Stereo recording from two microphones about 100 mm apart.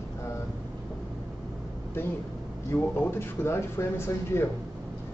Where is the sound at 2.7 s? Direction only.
25° left (ahead or behind).